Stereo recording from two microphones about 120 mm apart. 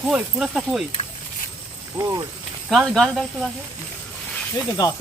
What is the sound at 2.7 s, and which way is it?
Speech, centre (ahead or behind).